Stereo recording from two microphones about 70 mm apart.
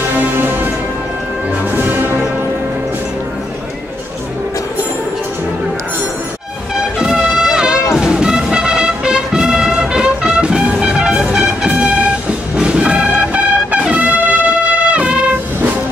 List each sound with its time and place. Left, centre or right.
0.4 s music: right
1.8 s music: right
6.7 s music: centre